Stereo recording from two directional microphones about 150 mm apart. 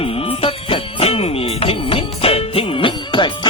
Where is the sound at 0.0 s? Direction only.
40° left (ahead or behind).